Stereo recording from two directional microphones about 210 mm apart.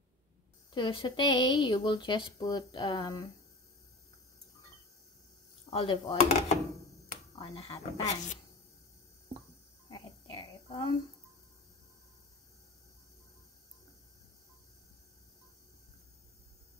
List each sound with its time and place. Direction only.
0.7 s speech: 20° left (ahead or behind)
5.7 s speech: 25° left (ahead or behind)
9.8 s a sound: 20° left (ahead or behind)